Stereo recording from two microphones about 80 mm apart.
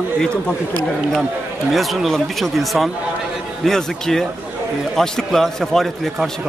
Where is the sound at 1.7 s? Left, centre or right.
Centre.